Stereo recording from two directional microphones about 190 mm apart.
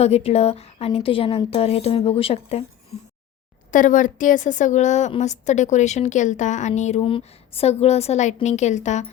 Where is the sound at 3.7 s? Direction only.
45° left (ahead or behind).